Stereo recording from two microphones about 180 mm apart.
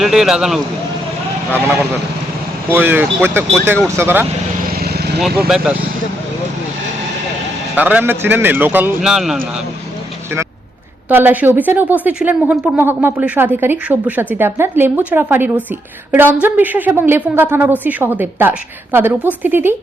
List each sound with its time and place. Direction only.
0.0 s a man's voice: centre (ahead or behind)
2.6 s a woman's voice: 10° right (ahead or behind)
4.7 s vehicle: 60° right (ahead or behind)
7.8 s a woman's voice: 10° right (ahead or behind)
11.1 s a woman's voice: 10° right (ahead or behind)